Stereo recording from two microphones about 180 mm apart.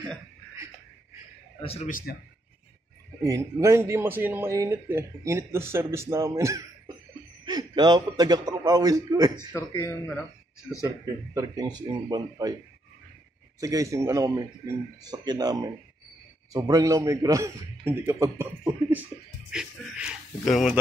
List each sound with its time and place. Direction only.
1.6 s a man's voice: 35° left (ahead or behind)
1.9 s a man's voice: 50° left (ahead or behind)
3.3 s a man's voice: 15° right (ahead or behind)
9.6 s speech: 15° left (ahead or behind)
11.3 s a man's voice: 20° right (ahead or behind)
13.6 s a man's voice: 20° right (ahead or behind); by 20.8 s centre (ahead or behind)